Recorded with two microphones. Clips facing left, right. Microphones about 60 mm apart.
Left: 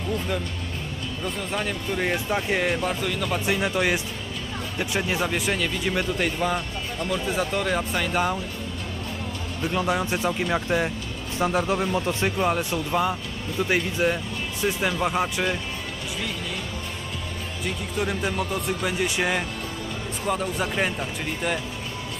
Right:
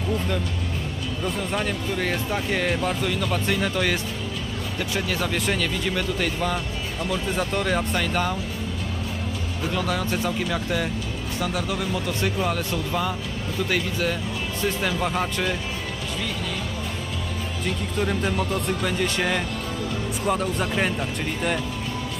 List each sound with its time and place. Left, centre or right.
1.2 s speech: centre
2.0 s speech: centre
9.7 s speech: centre
17.6 s speech: centre